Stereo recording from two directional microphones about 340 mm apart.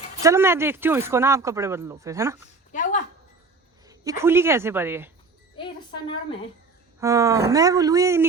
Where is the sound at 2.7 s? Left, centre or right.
Left.